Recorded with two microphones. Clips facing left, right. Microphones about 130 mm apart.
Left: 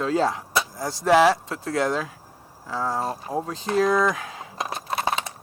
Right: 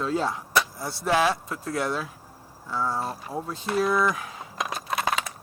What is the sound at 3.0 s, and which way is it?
Speech, 40° left (ahead or behind).